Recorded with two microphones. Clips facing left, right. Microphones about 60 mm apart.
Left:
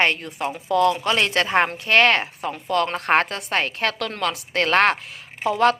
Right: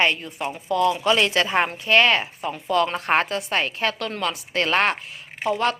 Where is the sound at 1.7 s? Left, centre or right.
Left.